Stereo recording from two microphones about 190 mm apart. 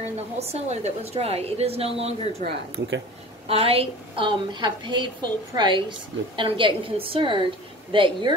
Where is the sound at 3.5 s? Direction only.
30° right (ahead or behind).